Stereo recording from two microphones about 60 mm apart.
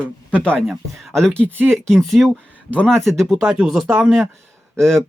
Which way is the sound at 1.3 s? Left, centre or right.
Right.